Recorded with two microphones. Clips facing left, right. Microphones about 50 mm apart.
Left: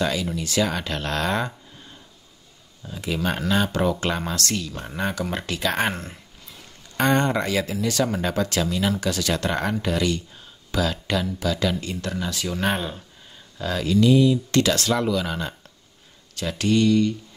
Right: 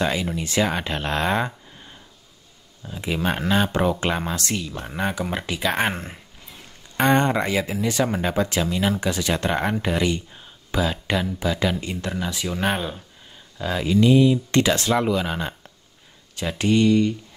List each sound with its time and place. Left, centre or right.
0.0 s speech: right
3.0 s speech: right
13.6 s speech: centre